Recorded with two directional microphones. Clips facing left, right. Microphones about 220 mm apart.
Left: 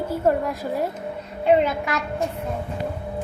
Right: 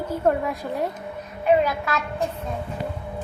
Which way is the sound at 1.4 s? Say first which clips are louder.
Left 1 dB; 25° left (ahead or behind).